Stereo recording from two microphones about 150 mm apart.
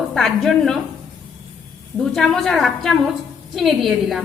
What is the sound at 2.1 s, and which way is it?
A woman's voice, centre (ahead or behind).